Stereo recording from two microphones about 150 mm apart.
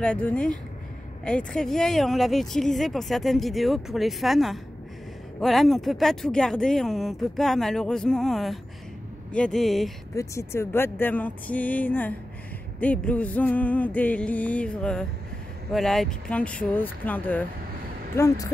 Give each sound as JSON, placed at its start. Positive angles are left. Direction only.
{"t": 0.0, "sound": "music", "side_deg": 10}
{"t": 1.2, "sound": "speech", "side_deg": 5}
{"t": 10.1, "sound": "music", "side_deg": 20}
{"t": 18.1, "sound": "speech", "side_deg": 20}